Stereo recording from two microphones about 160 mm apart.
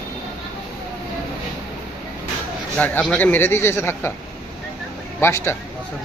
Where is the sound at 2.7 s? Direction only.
10° left (ahead or behind).